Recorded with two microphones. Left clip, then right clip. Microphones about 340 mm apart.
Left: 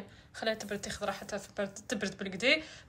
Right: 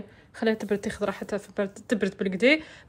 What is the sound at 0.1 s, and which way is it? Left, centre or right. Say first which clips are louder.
A woman's voice: right 7 dB; centre.